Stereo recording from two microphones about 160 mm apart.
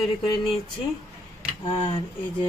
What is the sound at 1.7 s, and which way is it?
Speech, 30° left (ahead or behind).